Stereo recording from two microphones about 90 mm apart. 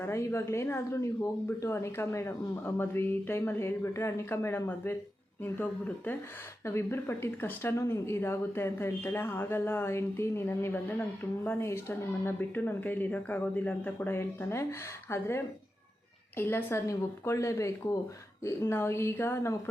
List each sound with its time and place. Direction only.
0.0 s speech: 30° left (ahead or behind)
6.7 s speech: 30° left (ahead or behind)
16.4 s speech: 25° left (ahead or behind)